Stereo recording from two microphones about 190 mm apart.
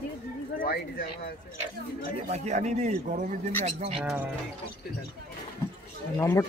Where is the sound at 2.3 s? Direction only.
35° right (ahead or behind).